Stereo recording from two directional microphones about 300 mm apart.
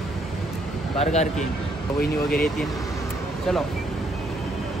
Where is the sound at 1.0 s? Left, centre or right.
Left.